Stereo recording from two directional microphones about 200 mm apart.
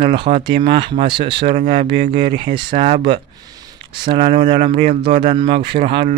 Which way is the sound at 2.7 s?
30° right (ahead or behind).